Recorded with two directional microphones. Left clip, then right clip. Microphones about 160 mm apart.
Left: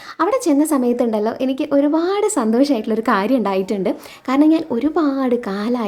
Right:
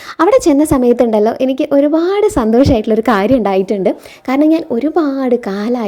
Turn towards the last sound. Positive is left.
turn(degrees=-25)  # may be behind; listen again after turning